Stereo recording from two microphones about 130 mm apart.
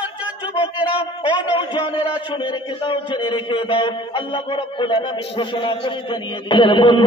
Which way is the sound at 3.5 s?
40° left (ahead or behind).